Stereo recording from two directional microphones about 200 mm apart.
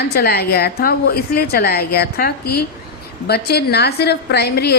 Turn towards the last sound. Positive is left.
turn(degrees=55)  # may be behind; listen again after turning